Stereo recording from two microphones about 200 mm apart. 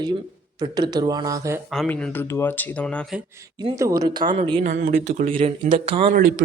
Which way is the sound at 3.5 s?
15° right (ahead or behind).